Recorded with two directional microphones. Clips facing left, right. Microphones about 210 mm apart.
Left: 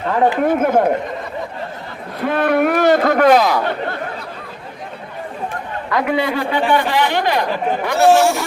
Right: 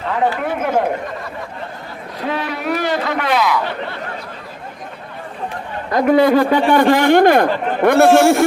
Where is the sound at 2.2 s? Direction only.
55° left (ahead or behind).